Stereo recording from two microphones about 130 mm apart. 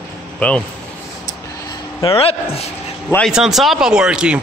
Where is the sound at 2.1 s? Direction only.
50° left (ahead or behind).